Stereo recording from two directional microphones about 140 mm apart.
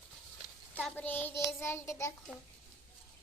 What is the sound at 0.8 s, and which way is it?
Child singing, 10° left (ahead or behind).